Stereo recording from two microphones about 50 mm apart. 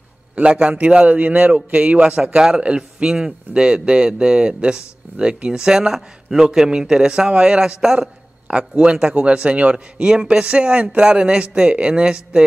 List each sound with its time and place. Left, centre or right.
0.4 s a man's voice: right; by 8.1 s centre
8.5 s a man's voice: right